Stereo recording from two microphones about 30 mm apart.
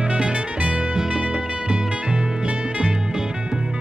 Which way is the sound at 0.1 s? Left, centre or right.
Right.